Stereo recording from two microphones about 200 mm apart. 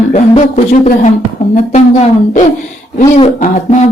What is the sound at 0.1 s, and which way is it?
A woman's voice, 35° left (ahead or behind).